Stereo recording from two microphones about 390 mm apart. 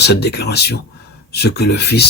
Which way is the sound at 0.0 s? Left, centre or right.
Left.